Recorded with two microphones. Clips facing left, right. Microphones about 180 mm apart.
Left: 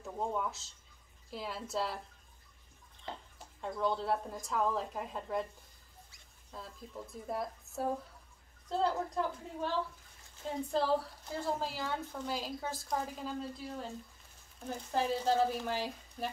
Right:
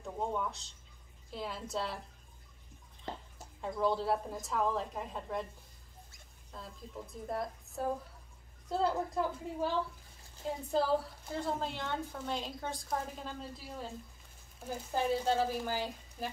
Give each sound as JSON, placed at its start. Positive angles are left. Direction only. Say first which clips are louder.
{"t": 0.0, "sound": "a woman's voice", "louder": "even", "side_deg": 5}
{"t": 3.6, "sound": "a woman's voice", "louder": "right 2 dB", "side_deg": 0}
{"t": 6.5, "sound": "a woman's voice", "louder": "even", "side_deg": 0}
{"t": 10.7, "sound": "a woman's voice", "louder": "right 1 dB", "side_deg": 0}
{"t": 14.9, "sound": "a woman's voice", "louder": "even", "side_deg": -5}